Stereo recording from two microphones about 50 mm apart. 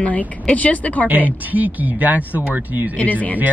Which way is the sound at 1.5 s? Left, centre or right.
Right.